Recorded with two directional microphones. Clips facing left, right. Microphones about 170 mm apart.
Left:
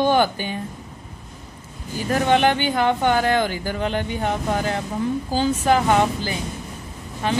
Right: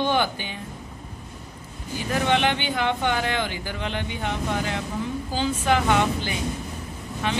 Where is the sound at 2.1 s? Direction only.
45° left (ahead or behind).